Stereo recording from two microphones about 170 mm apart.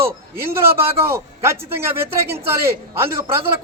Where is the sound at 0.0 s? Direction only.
15° right (ahead or behind).